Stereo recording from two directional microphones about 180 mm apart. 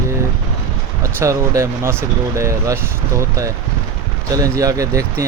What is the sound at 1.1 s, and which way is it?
Speech, 15° right (ahead or behind).